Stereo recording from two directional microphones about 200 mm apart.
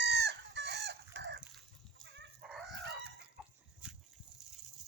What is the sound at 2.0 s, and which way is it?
Chicken, 65° right (ahead or behind).